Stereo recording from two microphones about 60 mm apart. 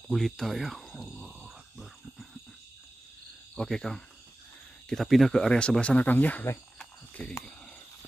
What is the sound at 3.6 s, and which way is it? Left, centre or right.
Speech, centre.